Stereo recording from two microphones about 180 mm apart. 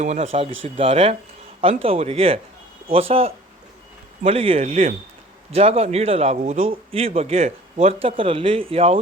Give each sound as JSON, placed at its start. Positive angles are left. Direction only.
{"t": 0.0, "sound": "a man's voice", "side_deg": -40}